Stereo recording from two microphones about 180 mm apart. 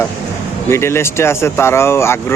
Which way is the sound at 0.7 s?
15° left (ahead or behind).